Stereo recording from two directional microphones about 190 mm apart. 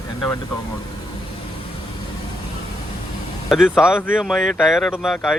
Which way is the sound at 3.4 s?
5° right (ahead or behind).